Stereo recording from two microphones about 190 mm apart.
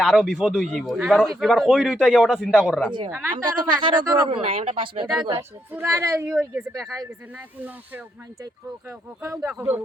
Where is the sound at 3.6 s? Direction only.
25° right (ahead or behind).